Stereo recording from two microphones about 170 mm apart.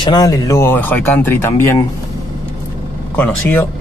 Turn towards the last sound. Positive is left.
turn(degrees=10)  # may be behind; listen again after turning